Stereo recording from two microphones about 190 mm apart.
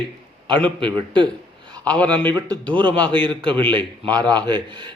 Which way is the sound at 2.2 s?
20° right (ahead or behind).